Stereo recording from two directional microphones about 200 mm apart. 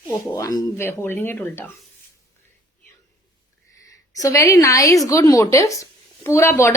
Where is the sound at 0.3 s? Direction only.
15° left (ahead or behind).